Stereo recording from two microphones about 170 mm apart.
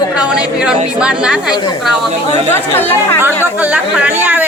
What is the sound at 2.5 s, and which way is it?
Speech, 15° left (ahead or behind).